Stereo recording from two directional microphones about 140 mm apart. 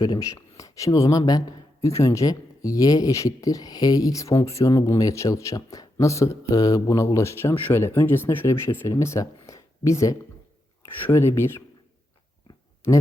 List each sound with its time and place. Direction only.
0.0 s speech: 25° left (ahead or behind)